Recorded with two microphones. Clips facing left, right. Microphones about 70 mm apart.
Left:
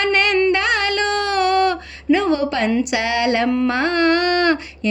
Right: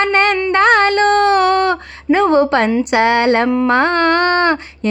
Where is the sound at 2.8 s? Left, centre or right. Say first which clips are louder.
Right 6 dB; right.